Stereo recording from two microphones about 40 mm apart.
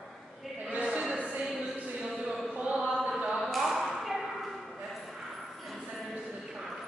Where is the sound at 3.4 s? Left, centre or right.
Centre.